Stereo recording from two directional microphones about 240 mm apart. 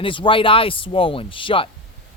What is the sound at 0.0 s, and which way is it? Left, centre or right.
Speech, left.